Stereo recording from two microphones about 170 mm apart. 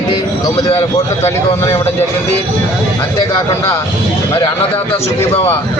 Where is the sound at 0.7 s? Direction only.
40° left (ahead or behind).